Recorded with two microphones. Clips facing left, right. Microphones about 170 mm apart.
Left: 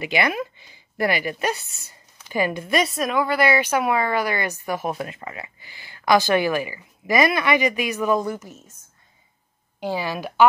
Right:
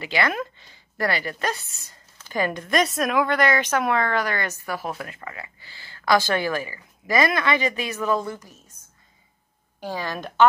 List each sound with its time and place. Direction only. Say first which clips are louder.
0.0 s speech: left 2 dB; 15° left (ahead or behind)
9.8 s speech: left 4 dB; 15° left (ahead or behind)